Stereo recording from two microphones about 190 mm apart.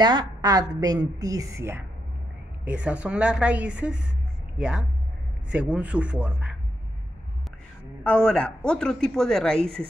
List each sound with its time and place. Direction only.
0.0 s a woman's voice: 20° right (ahead or behind); by 6.5 s 5° right (ahead or behind)
8.0 s a woman's voice: 5° left (ahead or behind)